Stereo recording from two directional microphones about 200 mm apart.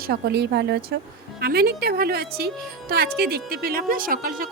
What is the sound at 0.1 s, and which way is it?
A woman's voice, 55° right (ahead or behind).